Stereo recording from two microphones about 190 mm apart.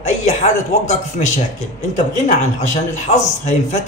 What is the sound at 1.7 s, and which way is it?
A man's voice, 40° left (ahead or behind).